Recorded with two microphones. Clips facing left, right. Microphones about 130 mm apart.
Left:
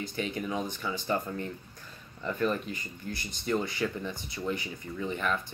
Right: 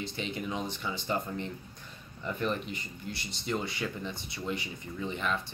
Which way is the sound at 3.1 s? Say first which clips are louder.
Left 2 dB; 50° left (ahead or behind).